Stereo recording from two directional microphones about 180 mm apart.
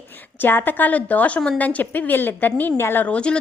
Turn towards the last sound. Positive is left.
turn(degrees=5)  # may be behind; listen again after turning